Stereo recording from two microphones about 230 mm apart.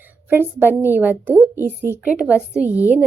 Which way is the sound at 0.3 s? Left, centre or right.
Centre.